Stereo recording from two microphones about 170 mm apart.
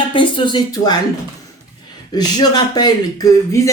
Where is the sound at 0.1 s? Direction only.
30° left (ahead or behind).